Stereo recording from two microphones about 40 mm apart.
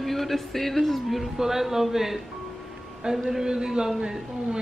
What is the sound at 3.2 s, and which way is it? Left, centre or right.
A man's voice, centre.